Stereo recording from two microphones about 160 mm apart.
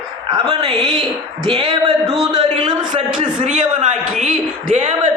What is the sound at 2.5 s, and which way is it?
Speech, 30° right (ahead or behind).